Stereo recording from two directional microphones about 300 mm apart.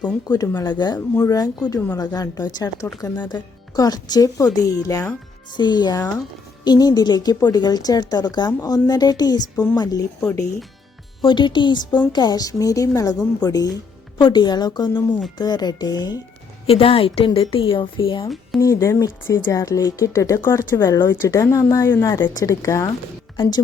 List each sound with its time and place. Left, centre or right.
0.0 s a woman's voice: centre
11.2 s a woman's voice: centre